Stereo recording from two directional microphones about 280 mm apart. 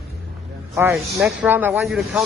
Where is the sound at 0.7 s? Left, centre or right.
Centre.